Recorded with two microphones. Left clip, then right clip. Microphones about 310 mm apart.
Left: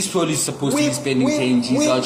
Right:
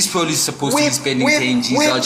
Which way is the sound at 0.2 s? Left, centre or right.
Centre.